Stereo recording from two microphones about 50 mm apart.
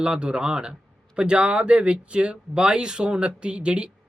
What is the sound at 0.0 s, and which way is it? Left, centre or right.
A man's voice, centre.